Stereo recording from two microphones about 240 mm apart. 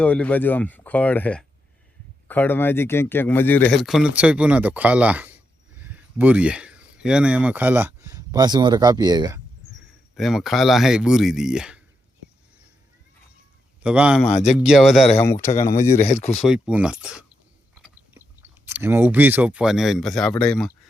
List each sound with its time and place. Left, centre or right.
0.0 s speech: centre
10.2 s speech: centre
13.8 s speech: centre
14.3 s speech: left
14.5 s speech: centre
15.2 s speech: centre
16.3 s speech: centre
18.6 s speech: centre